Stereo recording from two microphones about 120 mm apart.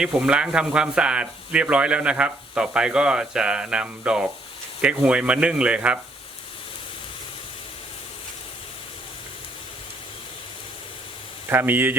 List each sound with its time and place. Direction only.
0.0 s speech: 5° right (ahead or behind)
11.4 s speech: 15° right (ahead or behind)